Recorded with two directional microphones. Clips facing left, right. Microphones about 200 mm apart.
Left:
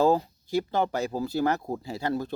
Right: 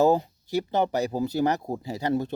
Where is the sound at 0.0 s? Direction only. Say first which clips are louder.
Right 2 dB; 20° right (ahead or behind).